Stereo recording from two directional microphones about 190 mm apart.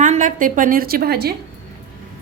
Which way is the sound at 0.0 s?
40° right (ahead or behind).